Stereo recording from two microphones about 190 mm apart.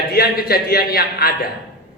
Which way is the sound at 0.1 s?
55° left (ahead or behind).